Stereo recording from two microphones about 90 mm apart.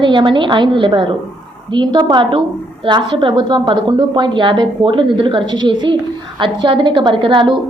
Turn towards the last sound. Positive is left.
turn(degrees=-65)  # may be behind; listen again after turning